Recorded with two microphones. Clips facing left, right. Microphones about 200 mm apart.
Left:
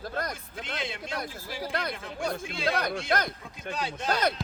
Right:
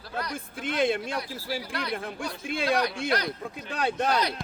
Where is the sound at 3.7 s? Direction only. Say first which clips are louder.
Right 6 dB; 55° right (ahead or behind).